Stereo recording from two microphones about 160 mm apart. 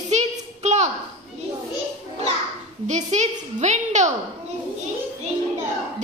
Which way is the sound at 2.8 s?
45° right (ahead or behind).